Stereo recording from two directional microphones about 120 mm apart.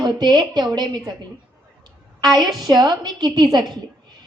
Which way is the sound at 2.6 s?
35° right (ahead or behind).